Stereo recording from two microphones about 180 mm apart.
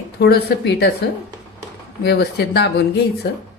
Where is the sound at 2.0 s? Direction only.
65° left (ahead or behind).